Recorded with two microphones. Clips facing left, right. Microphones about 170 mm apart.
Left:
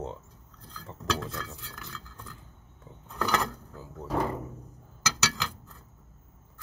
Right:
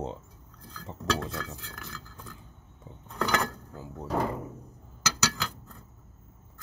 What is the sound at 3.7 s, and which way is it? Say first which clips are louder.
Speech: right 2 dB; 15° right (ahead or behind).